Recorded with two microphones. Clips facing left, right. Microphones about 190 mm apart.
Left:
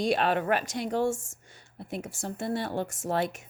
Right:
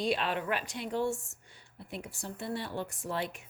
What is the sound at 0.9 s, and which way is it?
Speech, 90° left.